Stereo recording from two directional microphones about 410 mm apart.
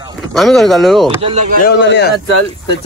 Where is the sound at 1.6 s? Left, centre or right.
Left.